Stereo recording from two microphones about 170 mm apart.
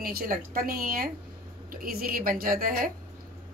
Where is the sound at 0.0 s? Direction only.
60° right (ahead or behind).